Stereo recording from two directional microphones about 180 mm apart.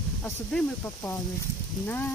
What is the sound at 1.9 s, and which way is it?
Speech, 10° left (ahead or behind).